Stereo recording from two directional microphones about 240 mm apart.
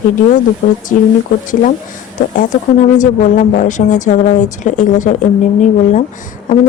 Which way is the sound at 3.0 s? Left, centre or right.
Left.